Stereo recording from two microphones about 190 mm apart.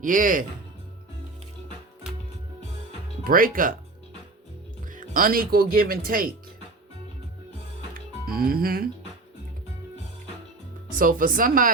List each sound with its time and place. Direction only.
0.0 s speech: 45° right (ahead or behind)
3.2 s speech: 50° right (ahead or behind)
4.9 s speech: 50° right (ahead or behind)
8.3 s speech: 50° right (ahead or behind)
10.9 s speech: 45° right (ahead or behind)